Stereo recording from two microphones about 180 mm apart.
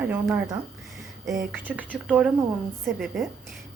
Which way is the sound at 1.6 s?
10° right (ahead or behind).